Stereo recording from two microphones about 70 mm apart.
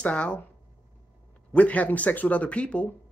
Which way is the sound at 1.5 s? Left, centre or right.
Centre.